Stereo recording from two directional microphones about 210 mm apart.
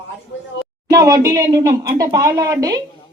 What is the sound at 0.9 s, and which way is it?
Speech, 15° right (ahead or behind).